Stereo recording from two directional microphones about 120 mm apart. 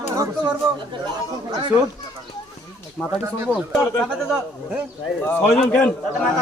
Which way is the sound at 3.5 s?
Centre (ahead or behind).